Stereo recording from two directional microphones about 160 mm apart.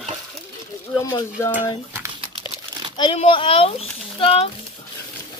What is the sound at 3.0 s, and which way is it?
Speech, 30° left (ahead or behind).